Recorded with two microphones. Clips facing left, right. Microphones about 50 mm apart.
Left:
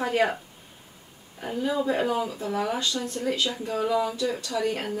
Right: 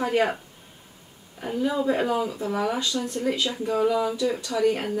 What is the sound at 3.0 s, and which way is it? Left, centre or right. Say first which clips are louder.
Speech: right 3 dB; centre.